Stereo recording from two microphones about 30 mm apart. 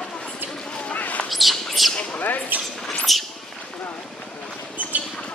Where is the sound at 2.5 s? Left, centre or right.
Right.